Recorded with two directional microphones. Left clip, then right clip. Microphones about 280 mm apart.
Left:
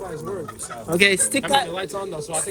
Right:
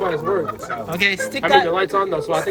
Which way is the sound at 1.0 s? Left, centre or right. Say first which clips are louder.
Left 1 dB; left.